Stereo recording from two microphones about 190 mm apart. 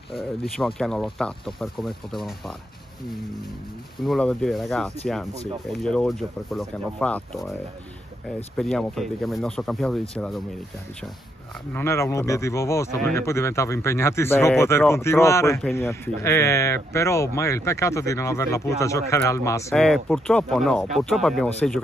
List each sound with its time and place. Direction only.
0.6 s speech: centre (ahead or behind)
4.0 s speech: centre (ahead or behind)
8.5 s speech: centre (ahead or behind)
11.7 s speech: 15° left (ahead or behind)
19.7 s speech: centre (ahead or behind)